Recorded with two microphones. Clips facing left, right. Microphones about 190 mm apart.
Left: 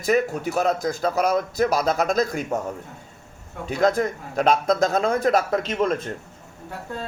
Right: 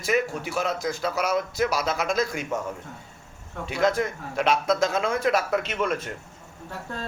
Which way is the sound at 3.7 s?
40° left (ahead or behind).